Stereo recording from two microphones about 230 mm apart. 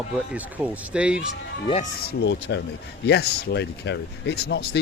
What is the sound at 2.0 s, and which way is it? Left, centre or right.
Speech, left.